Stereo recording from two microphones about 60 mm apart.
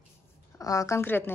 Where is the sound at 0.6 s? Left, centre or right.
Left.